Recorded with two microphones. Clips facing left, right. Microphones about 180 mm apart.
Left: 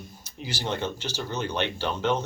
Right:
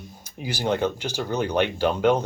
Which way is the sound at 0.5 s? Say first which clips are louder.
Right 6 dB; 55° right (ahead or behind).